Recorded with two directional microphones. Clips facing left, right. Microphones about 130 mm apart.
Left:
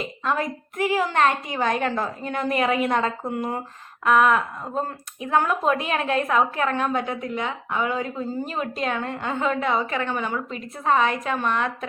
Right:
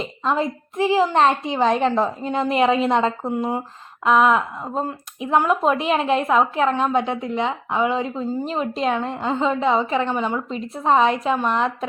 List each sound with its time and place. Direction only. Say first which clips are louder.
0.3 s a woman's voice: right 4 dB; 25° right (ahead or behind)